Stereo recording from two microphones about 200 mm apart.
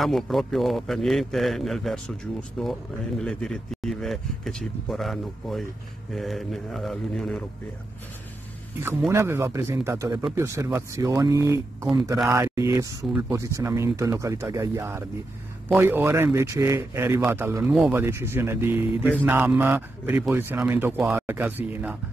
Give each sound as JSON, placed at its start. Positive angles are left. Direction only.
{"t": 0.0, "sound": "speech", "side_deg": 0}
{"t": 8.8, "sound": "speech", "side_deg": -10}